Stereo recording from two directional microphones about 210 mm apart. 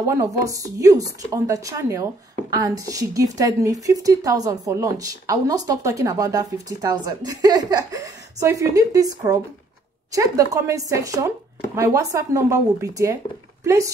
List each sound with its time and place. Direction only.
0.0 s a woman's voice: 15° right (ahead or behind)